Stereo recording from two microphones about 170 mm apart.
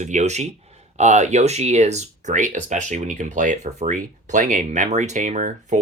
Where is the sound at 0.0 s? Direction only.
45° right (ahead or behind).